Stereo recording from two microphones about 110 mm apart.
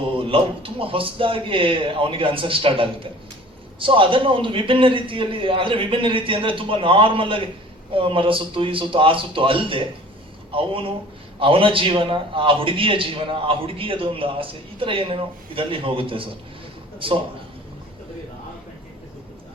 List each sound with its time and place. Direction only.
0.0 s a man's voice: 55° right (ahead or behind)